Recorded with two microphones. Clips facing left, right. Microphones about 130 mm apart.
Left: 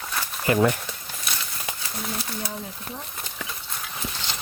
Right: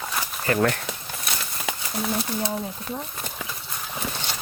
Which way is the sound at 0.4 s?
15° left (ahead or behind).